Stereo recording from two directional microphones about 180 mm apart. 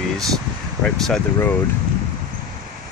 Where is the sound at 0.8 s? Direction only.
5° left (ahead or behind).